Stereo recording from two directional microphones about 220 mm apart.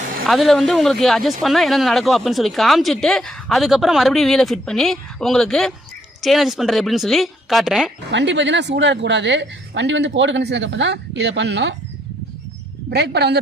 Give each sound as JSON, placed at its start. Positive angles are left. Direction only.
{"t": 0.3, "sound": "speech", "side_deg": 0}
{"t": 8.1, "sound": "a woman's voice", "side_deg": -55}
{"t": 12.9, "sound": "a woman's voice", "side_deg": -50}